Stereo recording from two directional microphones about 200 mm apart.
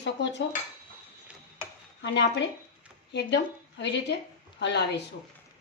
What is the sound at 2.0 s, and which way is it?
A woman's voice, 60° left (ahead or behind).